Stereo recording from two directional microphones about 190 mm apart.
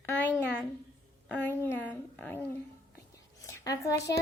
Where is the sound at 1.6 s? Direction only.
10° left (ahead or behind).